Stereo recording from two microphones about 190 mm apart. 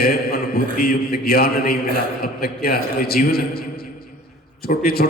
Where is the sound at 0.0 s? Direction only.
55° left (ahead or behind).